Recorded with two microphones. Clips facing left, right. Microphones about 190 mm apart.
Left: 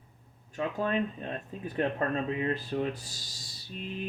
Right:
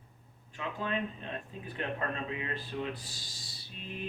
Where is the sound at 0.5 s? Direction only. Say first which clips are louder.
Left 6 dB; 45° left (ahead or behind).